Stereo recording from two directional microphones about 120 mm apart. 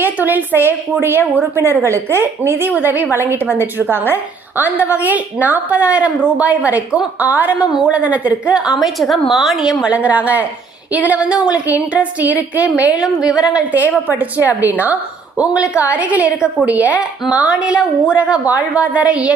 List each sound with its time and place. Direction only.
0.0 s a woman's voice: 15° right (ahead or behind)